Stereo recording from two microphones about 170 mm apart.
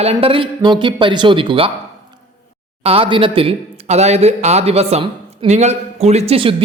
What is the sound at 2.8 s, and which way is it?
Speech, 35° right (ahead or behind).